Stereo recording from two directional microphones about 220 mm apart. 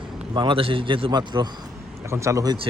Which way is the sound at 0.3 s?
25° right (ahead or behind).